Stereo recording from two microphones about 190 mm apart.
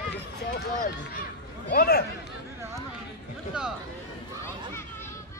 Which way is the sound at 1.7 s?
55° left (ahead or behind).